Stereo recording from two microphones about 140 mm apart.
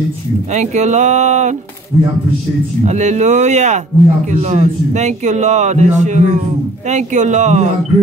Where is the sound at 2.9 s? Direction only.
55° right (ahead or behind).